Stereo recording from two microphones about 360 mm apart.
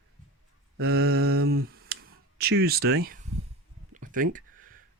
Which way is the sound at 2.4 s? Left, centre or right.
Right.